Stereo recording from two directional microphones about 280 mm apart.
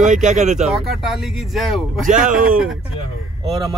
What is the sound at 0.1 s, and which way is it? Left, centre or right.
Speech, right.